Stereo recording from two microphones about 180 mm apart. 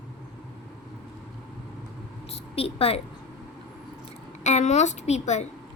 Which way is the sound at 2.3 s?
35° left (ahead or behind).